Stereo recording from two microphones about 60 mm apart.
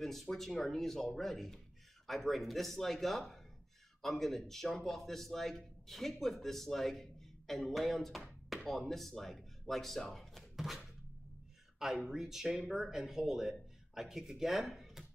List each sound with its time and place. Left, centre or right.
0.0 s a man's voice: centre